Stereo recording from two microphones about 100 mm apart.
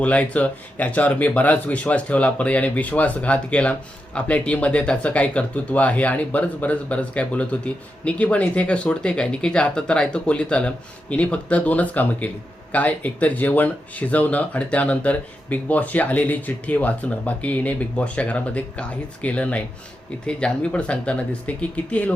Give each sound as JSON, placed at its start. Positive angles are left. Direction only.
{"t": 0.0, "sound": "speech", "side_deg": 15}